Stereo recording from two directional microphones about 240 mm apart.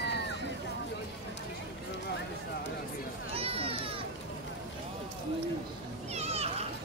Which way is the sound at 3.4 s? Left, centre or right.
Right.